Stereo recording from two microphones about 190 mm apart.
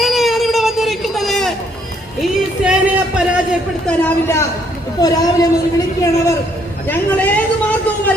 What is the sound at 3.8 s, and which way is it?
Speech, 10° left (ahead or behind).